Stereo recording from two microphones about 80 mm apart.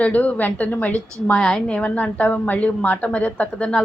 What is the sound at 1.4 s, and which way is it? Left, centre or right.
A woman's voice, centre.